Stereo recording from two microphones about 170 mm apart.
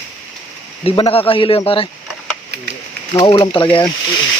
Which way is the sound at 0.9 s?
30° left (ahead or behind).